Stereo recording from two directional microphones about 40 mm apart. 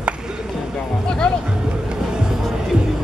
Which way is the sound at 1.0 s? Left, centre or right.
Left.